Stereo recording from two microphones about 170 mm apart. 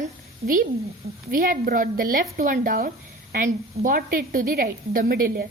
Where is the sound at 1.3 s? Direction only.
55° right (ahead or behind).